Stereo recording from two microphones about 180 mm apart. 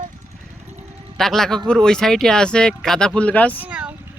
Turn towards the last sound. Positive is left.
turn(degrees=-5)  # may be behind; listen again after turning